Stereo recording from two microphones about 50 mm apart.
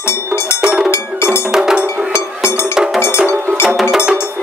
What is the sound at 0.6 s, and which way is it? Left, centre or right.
Cowbell, right.